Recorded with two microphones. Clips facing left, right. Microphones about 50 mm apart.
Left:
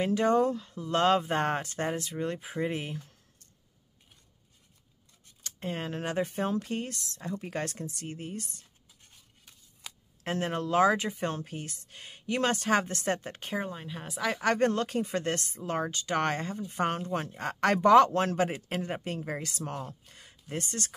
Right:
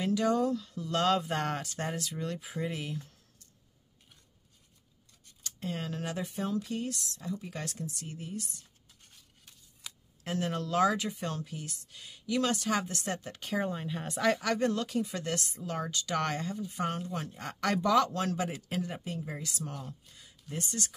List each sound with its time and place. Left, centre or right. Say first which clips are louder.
0.0 s speech: left 3 dB; left
5.4 s speech: left 2 dB; left
10.2 s speech: left 2 dB; left
13.6 s speech: right 4 dB; centre
14.4 s speech: left 4 dB; left